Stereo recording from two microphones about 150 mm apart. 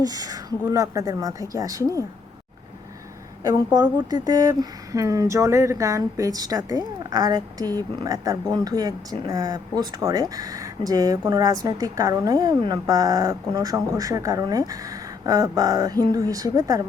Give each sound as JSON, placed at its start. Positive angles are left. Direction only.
{"t": 0.0, "sound": "speech", "side_deg": -25}
{"t": 3.4, "sound": "speech", "side_deg": -25}